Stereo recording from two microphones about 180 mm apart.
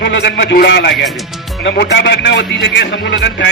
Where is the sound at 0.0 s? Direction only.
70° left (ahead or behind).